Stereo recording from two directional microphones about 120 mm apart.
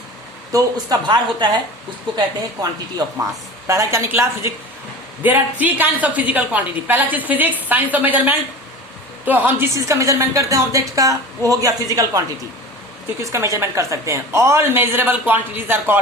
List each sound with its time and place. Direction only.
0.5 s speech: 35° right (ahead or behind)
3.7 s a woman's voice: 25° right (ahead or behind)
13.3 s a woman's voice: 25° right (ahead or behind)